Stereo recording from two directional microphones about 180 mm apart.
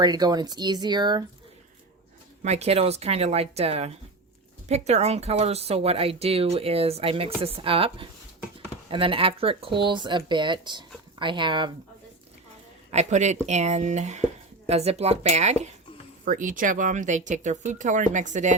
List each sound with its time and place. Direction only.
0.0 s speech: 20° right (ahead or behind)
2.4 s speech: 35° right (ahead or behind)
12.9 s speech: 40° right (ahead or behind)